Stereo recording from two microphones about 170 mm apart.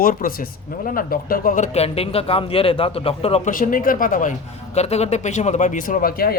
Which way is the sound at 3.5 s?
55° left (ahead or behind).